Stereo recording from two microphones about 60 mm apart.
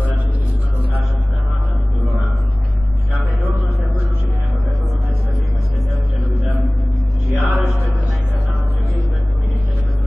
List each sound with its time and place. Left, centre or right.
7.3 s mantra: left